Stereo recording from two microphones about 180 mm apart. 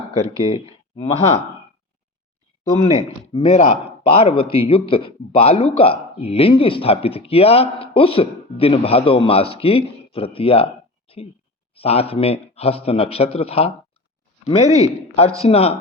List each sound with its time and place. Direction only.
0.5 s speech: 35° left (ahead or behind)
3.3 s a man's voice: 35° left (ahead or behind)
11.1 s a sound: 30° left (ahead or behind)
11.7 s a man's voice: 35° left (ahead or behind)